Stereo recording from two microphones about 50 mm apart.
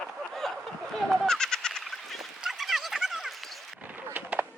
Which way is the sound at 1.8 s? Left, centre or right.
Centre.